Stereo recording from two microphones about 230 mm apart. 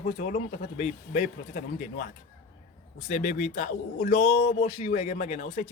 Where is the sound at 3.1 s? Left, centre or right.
Left.